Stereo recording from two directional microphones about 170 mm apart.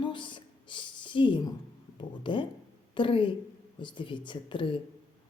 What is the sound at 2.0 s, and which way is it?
A woman's voice, 30° left (ahead or behind).